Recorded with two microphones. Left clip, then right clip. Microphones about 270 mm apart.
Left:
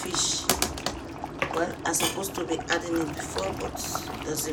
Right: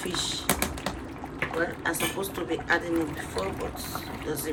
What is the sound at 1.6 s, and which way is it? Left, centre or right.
Speech, centre.